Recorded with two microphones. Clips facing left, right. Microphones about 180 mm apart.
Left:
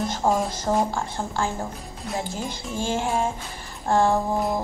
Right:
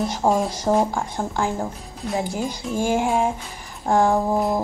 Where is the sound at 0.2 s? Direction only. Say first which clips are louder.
Right 3 dB; 10° right (ahead or behind).